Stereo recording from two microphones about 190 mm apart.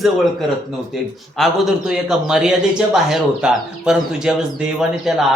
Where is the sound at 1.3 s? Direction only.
Centre (ahead or behind).